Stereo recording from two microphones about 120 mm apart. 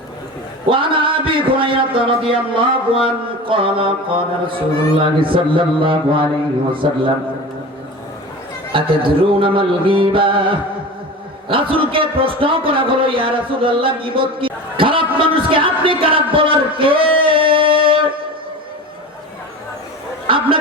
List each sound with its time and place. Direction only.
0.7 s a man's voice: 45° right (ahead or behind)
8.7 s a man's voice: 45° right (ahead or behind)
20.2 s a sound: 50° right (ahead or behind)